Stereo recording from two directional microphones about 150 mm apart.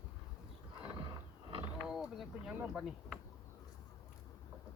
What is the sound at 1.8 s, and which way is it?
Speech, 5° right (ahead or behind).